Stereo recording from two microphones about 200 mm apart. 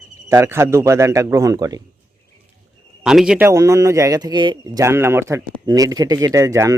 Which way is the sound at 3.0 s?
5° right (ahead or behind).